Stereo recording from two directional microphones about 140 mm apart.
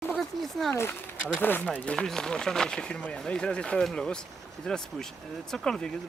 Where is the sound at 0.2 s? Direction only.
Centre (ahead or behind).